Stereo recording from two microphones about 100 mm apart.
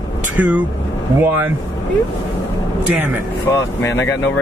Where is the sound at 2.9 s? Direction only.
20° right (ahead or behind).